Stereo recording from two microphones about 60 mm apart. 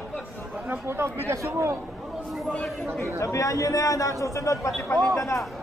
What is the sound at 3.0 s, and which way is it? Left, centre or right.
A man's voice, left.